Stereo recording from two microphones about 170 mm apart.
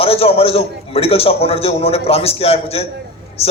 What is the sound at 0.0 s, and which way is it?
A man's voice, 35° left (ahead or behind).